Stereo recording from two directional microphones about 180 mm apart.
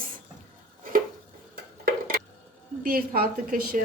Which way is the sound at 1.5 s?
50° right (ahead or behind).